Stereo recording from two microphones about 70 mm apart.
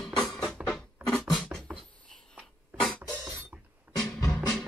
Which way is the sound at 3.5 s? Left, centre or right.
Right.